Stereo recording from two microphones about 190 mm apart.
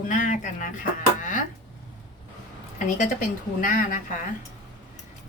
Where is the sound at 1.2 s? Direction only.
45° left (ahead or behind).